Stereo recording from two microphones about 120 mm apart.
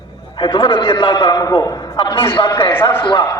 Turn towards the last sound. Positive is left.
turn(degrees=20)  # may be behind; listen again after turning